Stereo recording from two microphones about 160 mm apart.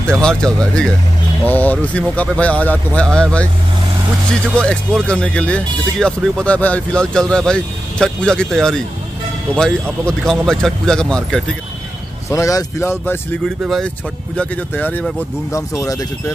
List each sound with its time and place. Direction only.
0.0 s speech: 5° left (ahead or behind)
10.0 s speech: 5° left (ahead or behind)
12.3 s speech: 20° left (ahead or behind)